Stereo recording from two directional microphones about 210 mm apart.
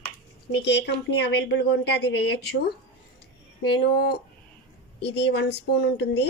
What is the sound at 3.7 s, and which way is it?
Speech, 50° left (ahead or behind).